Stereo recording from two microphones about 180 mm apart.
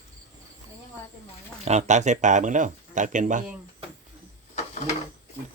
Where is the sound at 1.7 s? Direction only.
40° right (ahead or behind).